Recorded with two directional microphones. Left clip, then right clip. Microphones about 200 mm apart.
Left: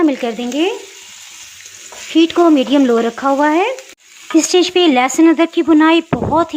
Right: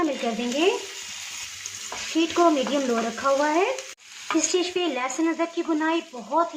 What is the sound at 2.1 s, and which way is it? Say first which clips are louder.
Speech: left 10 dB; 35° left (ahead or behind).